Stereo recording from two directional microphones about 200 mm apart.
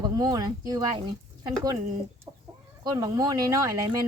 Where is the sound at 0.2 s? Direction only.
20° right (ahead or behind).